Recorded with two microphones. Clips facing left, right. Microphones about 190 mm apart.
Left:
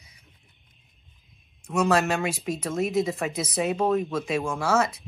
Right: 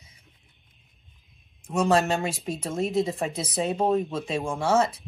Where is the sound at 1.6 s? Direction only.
30° right (ahead or behind).